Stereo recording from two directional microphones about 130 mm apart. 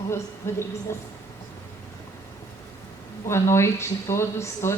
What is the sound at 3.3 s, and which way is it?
A woman's voice, 20° left (ahead or behind).